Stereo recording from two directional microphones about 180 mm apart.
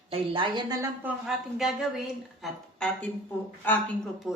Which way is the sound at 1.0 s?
5° right (ahead or behind).